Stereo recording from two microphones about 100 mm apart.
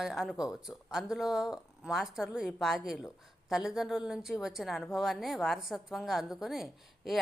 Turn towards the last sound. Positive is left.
turn(degrees=0)  # may be behind; listen again after turning